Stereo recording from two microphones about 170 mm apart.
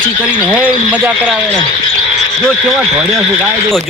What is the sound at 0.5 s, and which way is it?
Speech, 10° right (ahead or behind).